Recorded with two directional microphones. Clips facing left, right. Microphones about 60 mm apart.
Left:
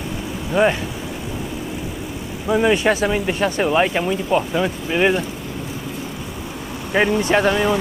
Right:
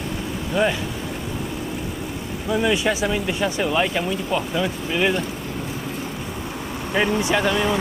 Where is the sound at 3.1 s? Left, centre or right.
Left.